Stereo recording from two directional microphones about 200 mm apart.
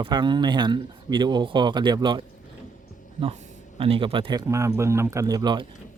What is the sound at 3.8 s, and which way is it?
Speech, 30° right (ahead or behind).